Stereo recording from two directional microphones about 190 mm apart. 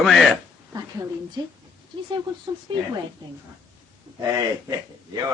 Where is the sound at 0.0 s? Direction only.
Centre (ahead or behind).